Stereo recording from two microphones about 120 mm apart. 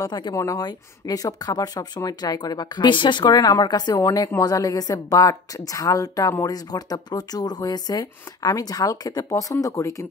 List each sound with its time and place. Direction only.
0.0 s a woman's voice: 35° left (ahead or behind)